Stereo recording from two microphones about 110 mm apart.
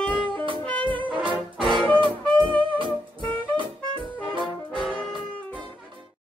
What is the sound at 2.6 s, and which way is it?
Music, 50° right (ahead or behind).